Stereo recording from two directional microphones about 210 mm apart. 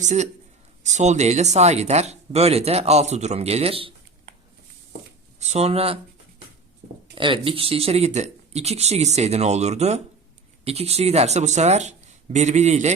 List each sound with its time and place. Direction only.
0.0 s speech: 35° right (ahead or behind)
5.4 s speech: 30° right (ahead or behind)
7.2 s speech: 25° right (ahead or behind)